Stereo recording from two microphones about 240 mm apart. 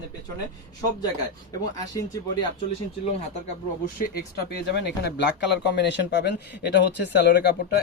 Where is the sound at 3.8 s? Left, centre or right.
Left.